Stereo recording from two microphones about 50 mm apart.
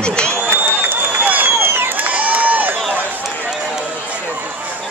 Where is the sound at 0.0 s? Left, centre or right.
Centre.